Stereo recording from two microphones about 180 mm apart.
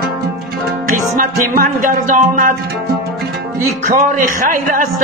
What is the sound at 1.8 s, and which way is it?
Speech, 45° right (ahead or behind).